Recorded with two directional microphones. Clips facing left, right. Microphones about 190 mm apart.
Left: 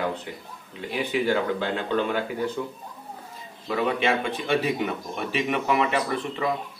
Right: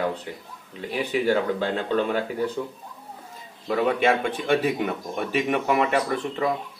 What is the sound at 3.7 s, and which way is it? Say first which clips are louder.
Speech: right 3 dB; 50° right (ahead or behind).